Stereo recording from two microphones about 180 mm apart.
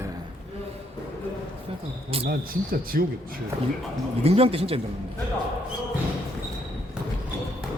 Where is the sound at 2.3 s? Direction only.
55° right (ahead or behind).